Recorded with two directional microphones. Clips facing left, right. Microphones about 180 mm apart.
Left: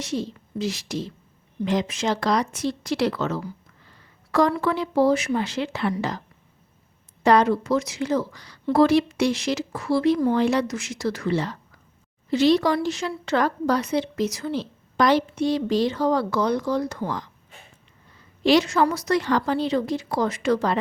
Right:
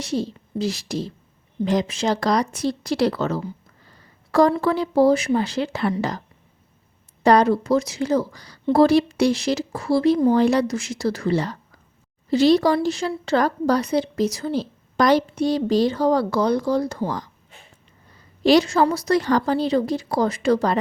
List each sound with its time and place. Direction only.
0.0 s a woman's voice: 35° right (ahead or behind)
18.4 s a woman's voice: 35° right (ahead or behind)